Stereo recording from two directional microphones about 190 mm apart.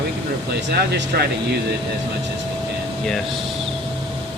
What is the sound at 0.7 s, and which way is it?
Speech, 60° right (ahead or behind).